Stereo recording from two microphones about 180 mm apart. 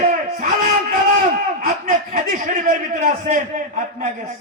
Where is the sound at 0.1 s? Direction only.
45° right (ahead or behind).